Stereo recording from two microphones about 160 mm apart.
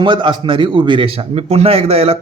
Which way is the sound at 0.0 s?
30° right (ahead or behind).